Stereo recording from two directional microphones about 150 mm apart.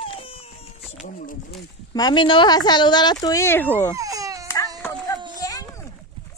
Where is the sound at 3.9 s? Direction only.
20° right (ahead or behind).